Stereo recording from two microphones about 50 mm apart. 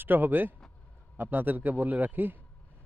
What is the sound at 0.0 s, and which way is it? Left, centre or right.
Speech, right.